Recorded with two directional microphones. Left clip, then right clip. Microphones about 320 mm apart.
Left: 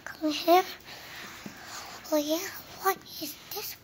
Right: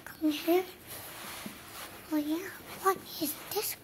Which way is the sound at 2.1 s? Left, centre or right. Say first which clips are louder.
Left 5 dB; centre.